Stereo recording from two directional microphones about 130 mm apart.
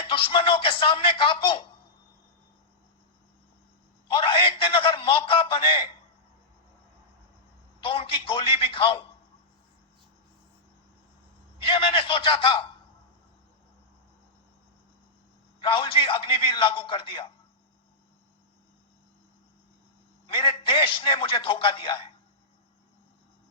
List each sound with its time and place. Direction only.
0.0 s speech: 40° left (ahead or behind)
4.1 s a sound: 45° left (ahead or behind)
7.8 s a sound: 45° left (ahead or behind)
11.6 s a man's voice: 45° left (ahead or behind)
15.6 s a man's voice: 40° left (ahead or behind)
20.2 s a man's voice: 45° left (ahead or behind)